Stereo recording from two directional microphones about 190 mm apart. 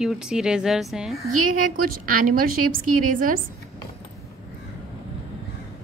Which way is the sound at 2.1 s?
45° right (ahead or behind).